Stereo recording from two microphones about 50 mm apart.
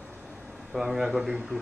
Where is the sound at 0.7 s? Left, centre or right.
Centre.